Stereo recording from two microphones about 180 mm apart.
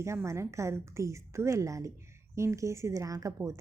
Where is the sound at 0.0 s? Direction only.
15° right (ahead or behind).